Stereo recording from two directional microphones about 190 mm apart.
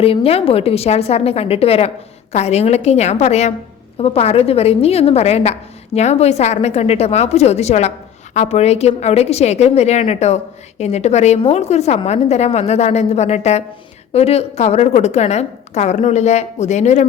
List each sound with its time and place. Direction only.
0.0 s a woman's voice: 30° left (ahead or behind)